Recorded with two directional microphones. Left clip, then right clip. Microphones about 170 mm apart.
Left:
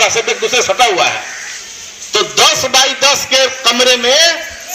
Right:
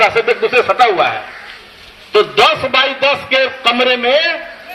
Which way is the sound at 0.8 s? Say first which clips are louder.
Left 1 dB; 30° left (ahead or behind).